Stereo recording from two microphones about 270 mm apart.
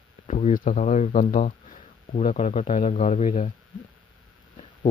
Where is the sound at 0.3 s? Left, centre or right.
Left.